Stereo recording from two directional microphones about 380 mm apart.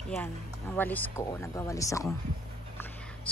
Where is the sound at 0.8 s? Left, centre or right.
Centre.